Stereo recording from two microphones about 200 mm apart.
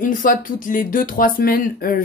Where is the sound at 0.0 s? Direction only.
45° left (ahead or behind).